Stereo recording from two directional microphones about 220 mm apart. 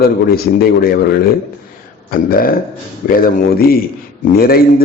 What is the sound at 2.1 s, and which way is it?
A man's voice, 40° left (ahead or behind).